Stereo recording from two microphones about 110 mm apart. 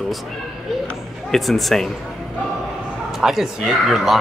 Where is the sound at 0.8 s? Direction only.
Centre (ahead or behind).